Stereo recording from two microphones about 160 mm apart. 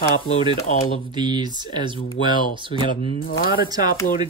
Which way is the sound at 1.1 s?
25° right (ahead or behind).